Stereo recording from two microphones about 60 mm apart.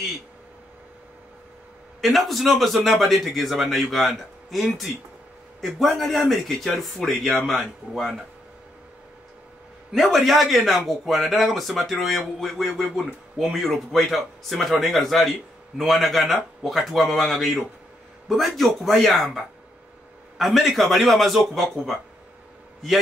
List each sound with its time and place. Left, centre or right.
2.0 s speech: centre
9.9 s speech: centre